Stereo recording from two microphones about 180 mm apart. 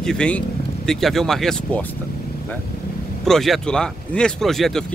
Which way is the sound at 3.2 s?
Centre (ahead or behind).